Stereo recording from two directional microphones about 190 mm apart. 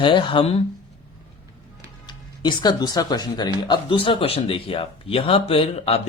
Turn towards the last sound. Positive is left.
turn(degrees=30)  # may be behind; listen again after turning